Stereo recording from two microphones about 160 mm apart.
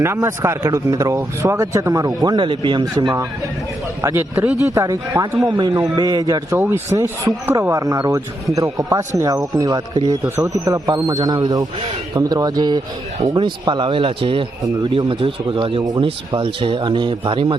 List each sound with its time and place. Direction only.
0.0 s speech: 15° right (ahead or behind)
4.0 s speech: 15° right (ahead or behind); by 17.6 s 30° right (ahead or behind)